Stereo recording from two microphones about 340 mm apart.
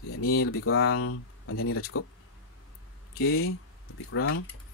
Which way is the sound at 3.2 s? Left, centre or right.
Left.